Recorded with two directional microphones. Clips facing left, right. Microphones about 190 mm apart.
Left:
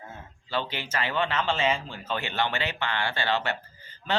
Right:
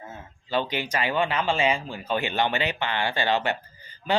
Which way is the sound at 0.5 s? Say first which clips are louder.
Right 4 dB; 15° right (ahead or behind).